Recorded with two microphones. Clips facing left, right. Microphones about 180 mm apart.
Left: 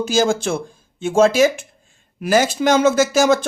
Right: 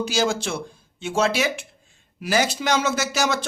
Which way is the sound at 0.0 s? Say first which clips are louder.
Left 5 dB; 50° left (ahead or behind).